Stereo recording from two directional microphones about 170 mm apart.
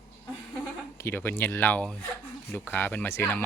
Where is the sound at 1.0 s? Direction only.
10° left (ahead or behind).